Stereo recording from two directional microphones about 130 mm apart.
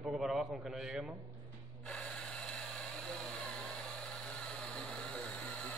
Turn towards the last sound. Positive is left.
turn(degrees=10)  # may be behind; listen again after turning